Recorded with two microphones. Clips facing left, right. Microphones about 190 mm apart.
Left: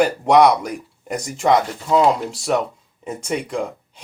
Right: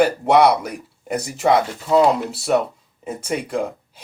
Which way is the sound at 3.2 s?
5° right (ahead or behind).